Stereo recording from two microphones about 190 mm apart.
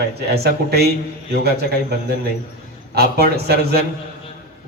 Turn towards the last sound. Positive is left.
turn(degrees=-55)  # may be behind; listen again after turning